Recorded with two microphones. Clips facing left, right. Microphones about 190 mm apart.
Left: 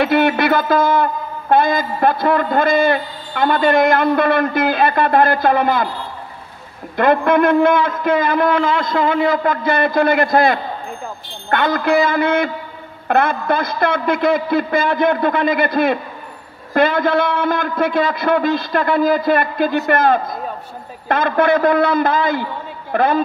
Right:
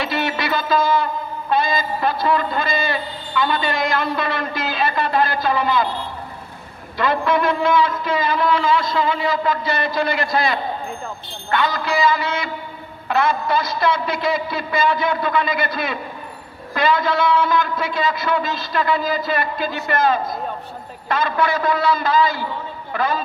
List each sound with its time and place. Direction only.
0.0 s a man's voice: 55° left (ahead or behind)
7.0 s a man's voice: 55° left (ahead or behind)